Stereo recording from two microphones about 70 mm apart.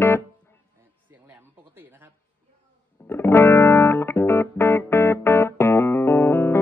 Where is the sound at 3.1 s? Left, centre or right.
Left.